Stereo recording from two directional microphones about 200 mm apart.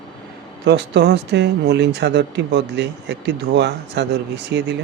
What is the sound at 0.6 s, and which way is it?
Speech, 60° right (ahead or behind).